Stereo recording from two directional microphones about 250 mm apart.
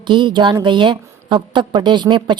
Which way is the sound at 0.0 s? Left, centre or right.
Centre.